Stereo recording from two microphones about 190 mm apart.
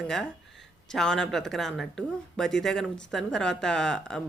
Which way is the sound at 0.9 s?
5° left (ahead or behind).